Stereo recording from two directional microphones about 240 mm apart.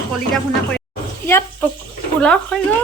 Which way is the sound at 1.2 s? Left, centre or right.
Centre.